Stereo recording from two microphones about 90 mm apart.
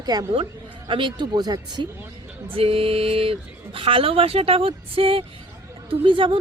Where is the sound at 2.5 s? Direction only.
90° right.